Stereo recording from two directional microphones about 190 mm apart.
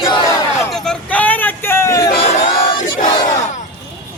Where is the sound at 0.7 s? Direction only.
5° left (ahead or behind).